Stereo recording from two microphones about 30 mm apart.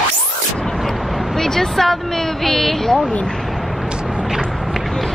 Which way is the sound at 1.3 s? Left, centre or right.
Centre.